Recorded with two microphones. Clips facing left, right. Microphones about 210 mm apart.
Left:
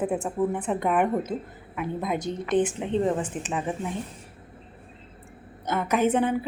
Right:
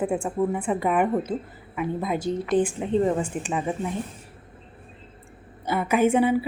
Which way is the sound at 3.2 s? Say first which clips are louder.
Right 2 dB; 5° left (ahead or behind).